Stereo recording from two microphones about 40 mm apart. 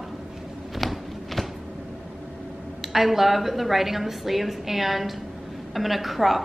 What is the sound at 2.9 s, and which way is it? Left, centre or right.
A woman's voice, centre.